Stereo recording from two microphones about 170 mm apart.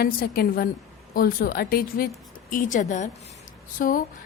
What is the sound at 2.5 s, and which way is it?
A woman's voice, 50° left (ahead or behind).